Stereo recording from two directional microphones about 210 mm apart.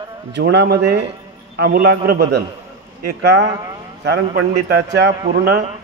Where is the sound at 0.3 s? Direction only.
55° right (ahead or behind).